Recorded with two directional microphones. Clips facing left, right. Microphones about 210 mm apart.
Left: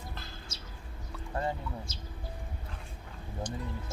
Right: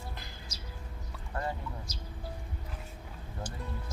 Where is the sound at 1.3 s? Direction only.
25° left (ahead or behind).